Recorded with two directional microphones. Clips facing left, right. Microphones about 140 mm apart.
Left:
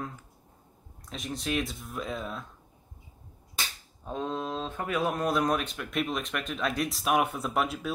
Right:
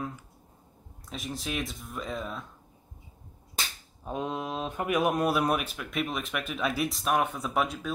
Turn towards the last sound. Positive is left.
turn(degrees=0)  # may be behind; listen again after turning